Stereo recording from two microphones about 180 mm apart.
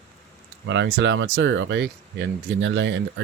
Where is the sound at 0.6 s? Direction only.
85° right.